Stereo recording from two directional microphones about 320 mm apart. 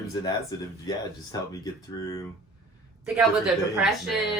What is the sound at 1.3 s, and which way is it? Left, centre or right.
Speech, centre.